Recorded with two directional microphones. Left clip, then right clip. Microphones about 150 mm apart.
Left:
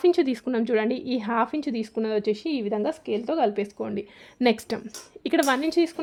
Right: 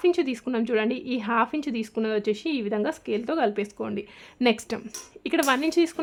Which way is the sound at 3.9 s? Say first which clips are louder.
Left 1 dB; 20° left (ahead or behind).